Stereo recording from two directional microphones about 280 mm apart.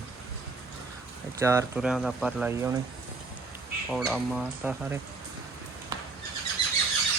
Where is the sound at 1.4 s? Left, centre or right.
Centre.